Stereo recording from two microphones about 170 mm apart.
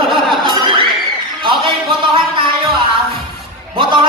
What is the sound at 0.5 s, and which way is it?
Crowd, 30° right (ahead or behind).